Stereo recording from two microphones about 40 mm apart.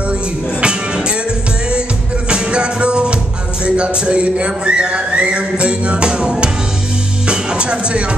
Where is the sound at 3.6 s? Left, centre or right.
Right.